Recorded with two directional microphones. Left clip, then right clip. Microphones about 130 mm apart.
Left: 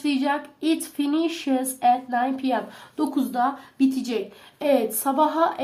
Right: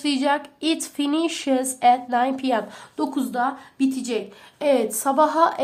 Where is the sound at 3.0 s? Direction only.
15° right (ahead or behind); by 5.6 s 35° right (ahead or behind).